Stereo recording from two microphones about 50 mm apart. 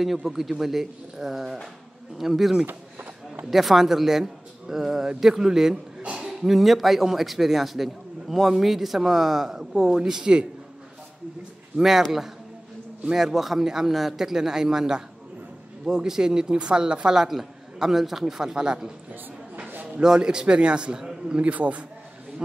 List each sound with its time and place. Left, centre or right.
0.0 s a man's voice: centre
2.6 s a sound: right
3.4 s speech: centre
6.0 s a sound: right
6.4 s a man's voice: centre
11.7 s a man's voice: centre
20.0 s speech: centre
21.5 s a man's voice: right